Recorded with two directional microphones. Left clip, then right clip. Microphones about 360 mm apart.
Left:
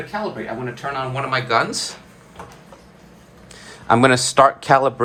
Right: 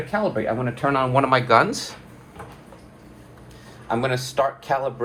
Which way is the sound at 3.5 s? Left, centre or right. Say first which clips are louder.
Left 10 dB; centre.